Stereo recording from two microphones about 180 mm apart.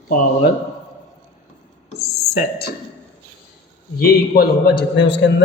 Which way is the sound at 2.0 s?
60° left (ahead or behind).